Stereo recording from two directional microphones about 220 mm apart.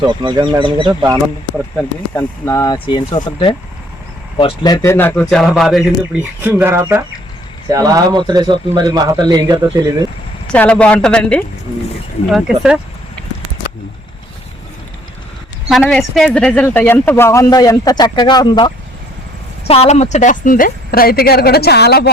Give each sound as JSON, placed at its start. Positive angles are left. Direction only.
{"t": 0.0, "sound": "speech", "side_deg": -20}
{"t": 2.1, "sound": "speech", "side_deg": 15}
{"t": 4.4, "sound": "speech", "side_deg": 20}
{"t": 10.5, "sound": "speech", "side_deg": 5}
{"t": 15.7, "sound": "speech", "side_deg": 0}